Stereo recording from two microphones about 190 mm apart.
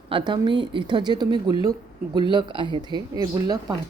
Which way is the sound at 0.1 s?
25° right (ahead or behind).